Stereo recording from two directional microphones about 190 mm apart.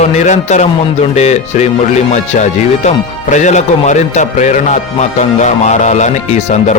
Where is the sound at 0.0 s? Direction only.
35° left (ahead or behind).